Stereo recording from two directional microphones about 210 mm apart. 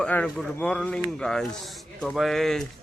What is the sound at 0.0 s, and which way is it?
A man's voice, 5° left (ahead or behind).